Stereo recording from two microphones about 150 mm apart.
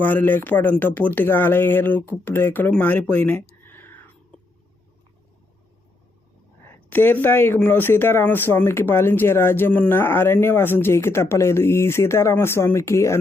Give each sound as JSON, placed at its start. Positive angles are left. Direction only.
{"t": 0.0, "sound": "speech", "side_deg": 10}
{"t": 3.7, "sound": "whispering", "side_deg": 15}
{"t": 6.7, "sound": "speech", "side_deg": 15}